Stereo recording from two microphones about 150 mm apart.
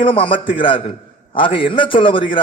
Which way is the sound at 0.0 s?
35° left (ahead or behind).